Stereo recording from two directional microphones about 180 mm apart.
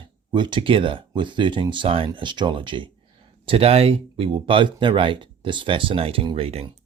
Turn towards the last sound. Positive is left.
turn(degrees=-35)  # may be behind; listen again after turning